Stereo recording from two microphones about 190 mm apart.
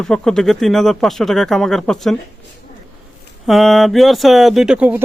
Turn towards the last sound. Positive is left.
turn(degrees=-5)  # may be behind; listen again after turning